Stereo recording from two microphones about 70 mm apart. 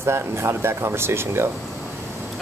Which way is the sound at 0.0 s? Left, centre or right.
Right.